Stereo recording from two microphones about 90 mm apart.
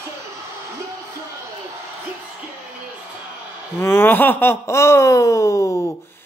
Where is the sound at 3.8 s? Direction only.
25° left (ahead or behind).